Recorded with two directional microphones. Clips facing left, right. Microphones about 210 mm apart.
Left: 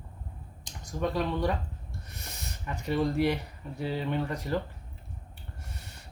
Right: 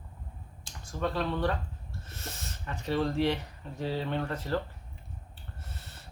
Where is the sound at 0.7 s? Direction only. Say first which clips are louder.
Left 1 dB; 15° left (ahead or behind).